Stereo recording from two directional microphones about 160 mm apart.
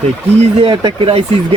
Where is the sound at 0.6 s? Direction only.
35° right (ahead or behind).